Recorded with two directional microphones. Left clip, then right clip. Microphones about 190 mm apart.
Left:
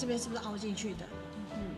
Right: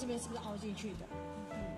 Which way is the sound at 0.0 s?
20° right (ahead or behind).